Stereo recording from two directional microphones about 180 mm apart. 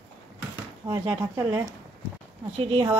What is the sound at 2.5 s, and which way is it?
Speech, 30° right (ahead or behind).